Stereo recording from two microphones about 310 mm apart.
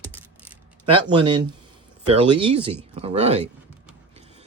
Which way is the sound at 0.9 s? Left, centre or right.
Centre.